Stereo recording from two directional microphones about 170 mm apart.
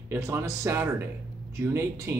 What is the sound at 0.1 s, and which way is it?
Speech, 15° right (ahead or behind).